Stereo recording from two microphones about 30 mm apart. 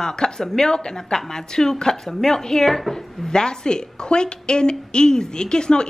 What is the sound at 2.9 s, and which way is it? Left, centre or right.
A woman's voice, left.